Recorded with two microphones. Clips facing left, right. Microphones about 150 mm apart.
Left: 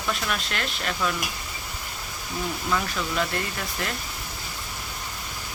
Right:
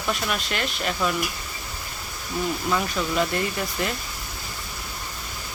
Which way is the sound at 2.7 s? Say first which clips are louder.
Even; 5° right (ahead or behind).